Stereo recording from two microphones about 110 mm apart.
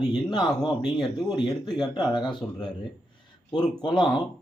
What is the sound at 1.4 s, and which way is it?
Speech, 40° left (ahead or behind).